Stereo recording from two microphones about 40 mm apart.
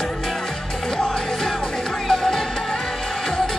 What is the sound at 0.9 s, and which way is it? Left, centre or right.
Music, centre.